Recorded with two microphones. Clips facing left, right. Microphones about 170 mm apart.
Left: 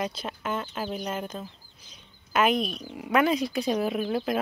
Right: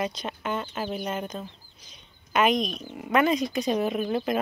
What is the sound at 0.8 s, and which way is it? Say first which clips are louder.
Speech: right 1 dB; centre (ahead or behind).